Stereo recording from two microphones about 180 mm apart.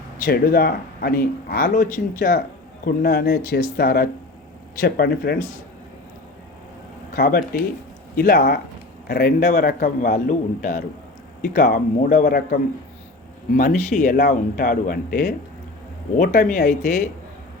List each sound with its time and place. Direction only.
0.2 s speech: 55° left (ahead or behind)
7.1 s speech: 55° left (ahead or behind)
13.6 s speech: 45° left (ahead or behind)